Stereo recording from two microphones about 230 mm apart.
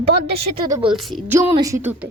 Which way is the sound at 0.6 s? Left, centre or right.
Right.